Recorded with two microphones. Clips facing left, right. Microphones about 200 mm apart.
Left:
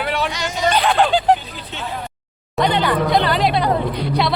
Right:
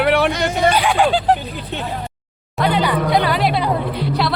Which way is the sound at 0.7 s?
10° right (ahead or behind).